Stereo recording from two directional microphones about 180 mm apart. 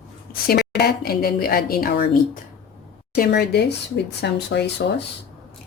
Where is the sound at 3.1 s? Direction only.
65° left (ahead or behind).